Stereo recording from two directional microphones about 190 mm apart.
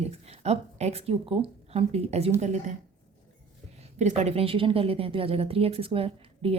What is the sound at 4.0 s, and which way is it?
Speech, 35° right (ahead or behind).